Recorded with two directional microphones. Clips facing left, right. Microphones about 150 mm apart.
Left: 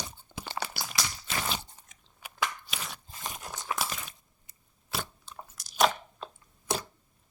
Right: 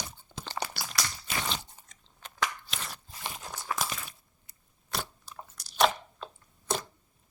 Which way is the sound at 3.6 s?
5° left (ahead or behind).